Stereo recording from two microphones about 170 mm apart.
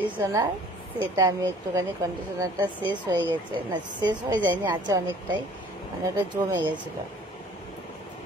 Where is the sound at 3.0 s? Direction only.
25° right (ahead or behind).